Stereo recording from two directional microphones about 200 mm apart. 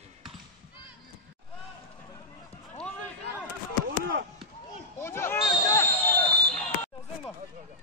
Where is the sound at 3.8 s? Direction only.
50° right (ahead or behind).